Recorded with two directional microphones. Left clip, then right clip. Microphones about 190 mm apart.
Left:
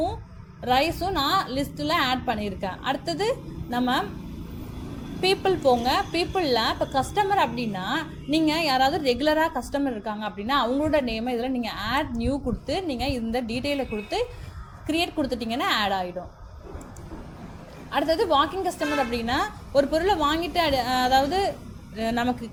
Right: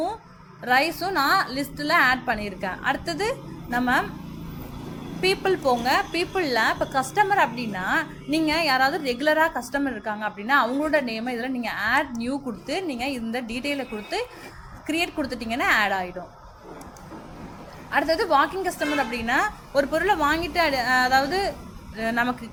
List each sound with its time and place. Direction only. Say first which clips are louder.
0.6 s a woman's voice: right 1 dB; 20° left (ahead or behind)
5.2 s a woman's voice: left 1 dB; 20° left (ahead or behind)
17.9 s a woman's voice: right 1 dB; 20° left (ahead or behind)